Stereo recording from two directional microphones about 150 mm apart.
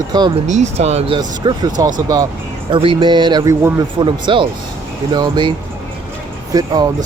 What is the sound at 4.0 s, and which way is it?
Speech, 30° right (ahead or behind).